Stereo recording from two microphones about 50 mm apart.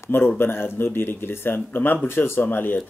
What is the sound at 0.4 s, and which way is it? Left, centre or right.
Speech, left.